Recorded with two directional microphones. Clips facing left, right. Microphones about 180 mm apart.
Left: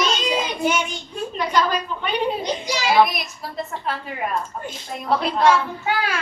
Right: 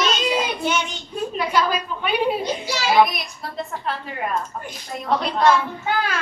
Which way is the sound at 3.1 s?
Centre (ahead or behind).